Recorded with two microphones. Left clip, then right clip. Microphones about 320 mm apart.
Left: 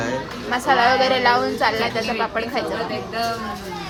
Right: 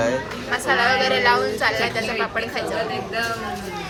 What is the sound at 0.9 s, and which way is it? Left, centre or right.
Speech, left.